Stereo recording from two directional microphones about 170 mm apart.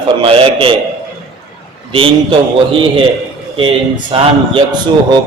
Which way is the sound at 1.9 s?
30° right (ahead or behind).